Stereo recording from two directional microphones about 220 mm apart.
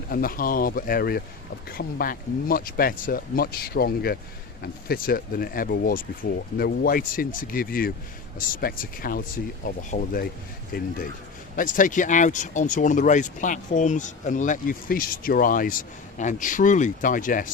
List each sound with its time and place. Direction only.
0.1 s speech: 40° left (ahead or behind)